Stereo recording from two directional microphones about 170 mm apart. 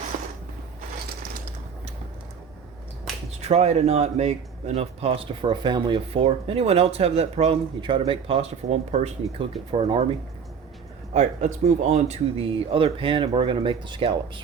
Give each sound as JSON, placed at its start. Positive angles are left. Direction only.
{"t": 0.1, "sound": "mechanisms", "side_deg": -50}
{"t": 3.4, "sound": "speech", "side_deg": -40}
{"t": 11.1, "sound": "speech", "side_deg": -45}